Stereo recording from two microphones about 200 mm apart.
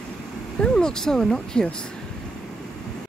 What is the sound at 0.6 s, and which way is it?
Speech, 5° left (ahead or behind).